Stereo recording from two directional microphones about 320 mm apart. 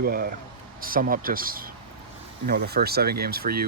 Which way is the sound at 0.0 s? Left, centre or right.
Right.